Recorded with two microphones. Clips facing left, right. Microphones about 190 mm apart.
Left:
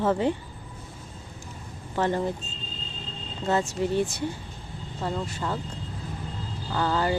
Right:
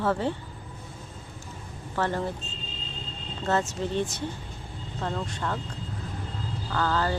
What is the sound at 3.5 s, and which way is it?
Speech, 10° left (ahead or behind).